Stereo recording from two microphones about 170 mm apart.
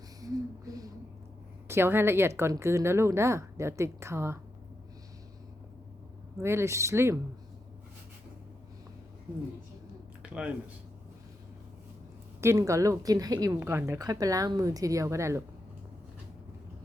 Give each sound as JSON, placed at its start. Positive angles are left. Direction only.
{"t": 0.2, "sound": "a sound", "side_deg": -20}
{"t": 1.6, "sound": "a woman's voice", "side_deg": -15}
{"t": 6.4, "sound": "a woman's voice", "side_deg": -15}
{"t": 10.2, "sound": "speech", "side_deg": -5}
{"t": 12.4, "sound": "a woman's voice", "side_deg": -15}